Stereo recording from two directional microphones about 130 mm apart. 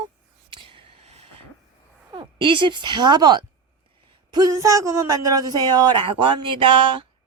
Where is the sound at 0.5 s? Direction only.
40° right (ahead or behind).